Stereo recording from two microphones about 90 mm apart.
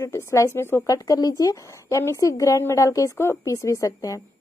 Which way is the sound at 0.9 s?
45° left (ahead or behind).